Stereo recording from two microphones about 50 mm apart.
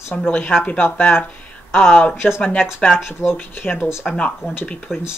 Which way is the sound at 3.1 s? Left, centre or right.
Left.